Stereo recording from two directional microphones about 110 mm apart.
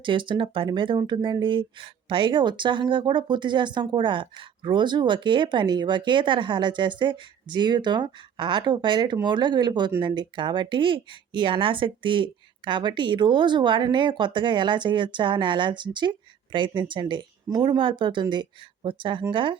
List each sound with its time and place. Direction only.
0.0 s speech: 45° right (ahead or behind)